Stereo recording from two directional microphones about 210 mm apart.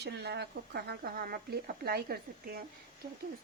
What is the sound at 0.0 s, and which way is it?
Speech, 55° right (ahead or behind).